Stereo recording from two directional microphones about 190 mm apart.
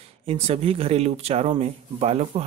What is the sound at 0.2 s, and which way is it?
Speech, 30° right (ahead or behind).